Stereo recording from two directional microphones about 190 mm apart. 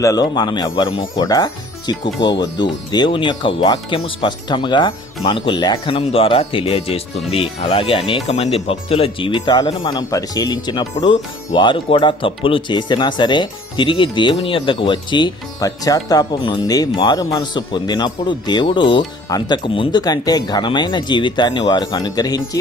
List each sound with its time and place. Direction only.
0.0 s speech: 20° left (ahead or behind)